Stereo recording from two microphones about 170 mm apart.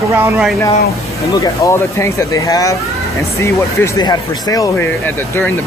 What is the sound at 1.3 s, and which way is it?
Speech, 20° left (ahead or behind).